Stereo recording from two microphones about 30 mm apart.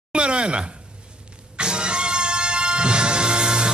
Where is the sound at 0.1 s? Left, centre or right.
Right.